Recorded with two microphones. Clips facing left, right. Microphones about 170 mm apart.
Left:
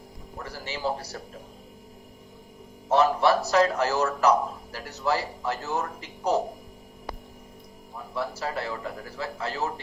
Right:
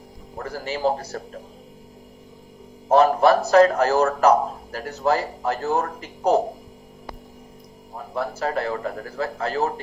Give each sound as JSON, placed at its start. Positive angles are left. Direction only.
{"t": 0.3, "sound": "speech", "side_deg": -50}
{"t": 2.9, "sound": "speech", "side_deg": -50}
{"t": 7.9, "sound": "speech", "side_deg": -50}